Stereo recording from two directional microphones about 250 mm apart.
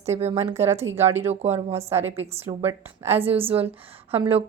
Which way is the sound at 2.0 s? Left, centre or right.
Centre.